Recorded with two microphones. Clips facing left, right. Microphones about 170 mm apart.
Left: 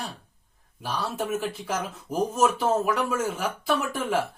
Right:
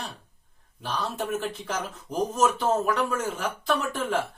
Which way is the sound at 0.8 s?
10° left (ahead or behind).